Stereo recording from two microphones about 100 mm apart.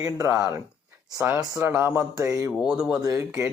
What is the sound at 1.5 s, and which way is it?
Speech, 30° right (ahead or behind).